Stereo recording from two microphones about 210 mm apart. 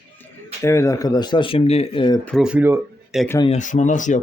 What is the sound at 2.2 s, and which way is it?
Speech, centre (ahead or behind).